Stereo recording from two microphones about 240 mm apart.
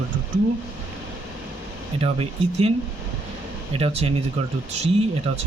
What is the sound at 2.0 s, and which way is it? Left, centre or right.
Speech, right.